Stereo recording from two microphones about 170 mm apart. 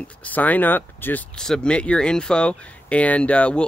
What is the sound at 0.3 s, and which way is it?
Speech, 10° left (ahead or behind).